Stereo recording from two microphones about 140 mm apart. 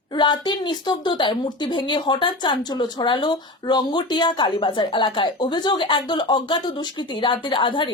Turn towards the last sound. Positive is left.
turn(degrees=35)  # may be behind; listen again after turning